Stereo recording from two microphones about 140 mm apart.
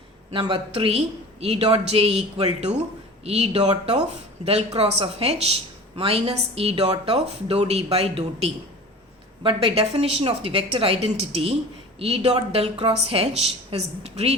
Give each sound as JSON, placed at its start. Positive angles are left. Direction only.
{"t": 0.3, "sound": "speech", "side_deg": -40}